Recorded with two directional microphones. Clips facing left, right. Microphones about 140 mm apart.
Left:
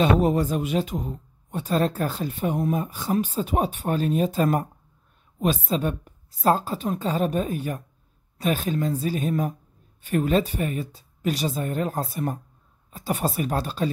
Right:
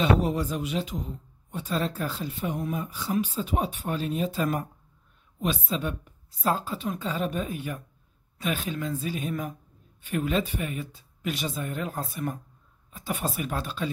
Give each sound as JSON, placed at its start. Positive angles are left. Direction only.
{"t": 0.0, "sound": "speech", "side_deg": 45}